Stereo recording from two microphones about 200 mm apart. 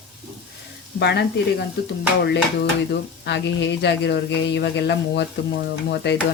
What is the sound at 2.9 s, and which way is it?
Speech, 60° left (ahead or behind).